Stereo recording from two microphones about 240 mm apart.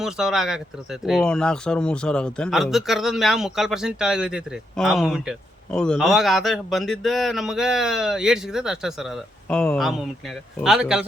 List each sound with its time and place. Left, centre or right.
0.0 s speech: centre